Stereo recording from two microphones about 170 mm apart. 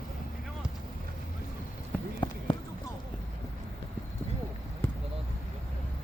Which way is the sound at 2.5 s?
30° left (ahead or behind).